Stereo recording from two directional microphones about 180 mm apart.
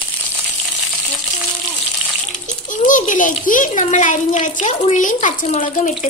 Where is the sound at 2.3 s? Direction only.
45° left (ahead or behind).